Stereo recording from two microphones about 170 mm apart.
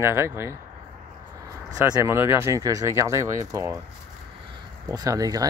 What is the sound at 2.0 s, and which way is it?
Speech, 15° right (ahead or behind).